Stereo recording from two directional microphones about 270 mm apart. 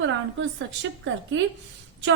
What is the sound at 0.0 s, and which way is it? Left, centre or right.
A woman's voice, right.